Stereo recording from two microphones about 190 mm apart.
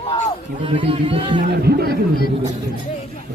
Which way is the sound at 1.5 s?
55° right (ahead or behind).